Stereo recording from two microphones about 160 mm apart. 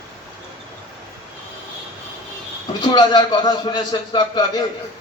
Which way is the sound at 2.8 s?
30° left (ahead or behind).